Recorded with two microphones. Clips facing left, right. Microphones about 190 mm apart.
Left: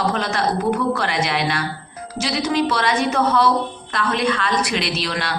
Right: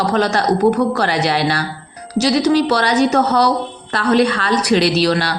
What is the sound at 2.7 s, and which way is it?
A woman's voice, 40° right (ahead or behind).